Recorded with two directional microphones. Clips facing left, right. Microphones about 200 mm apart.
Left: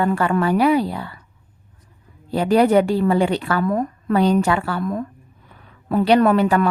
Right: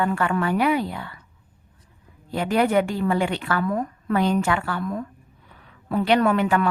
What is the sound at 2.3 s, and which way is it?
A woman's voice, 35° left (ahead or behind).